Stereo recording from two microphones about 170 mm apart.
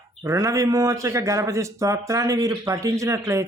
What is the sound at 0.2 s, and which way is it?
A man's voice, 20° right (ahead or behind).